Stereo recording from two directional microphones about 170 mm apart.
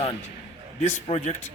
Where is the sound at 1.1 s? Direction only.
45° left (ahead or behind).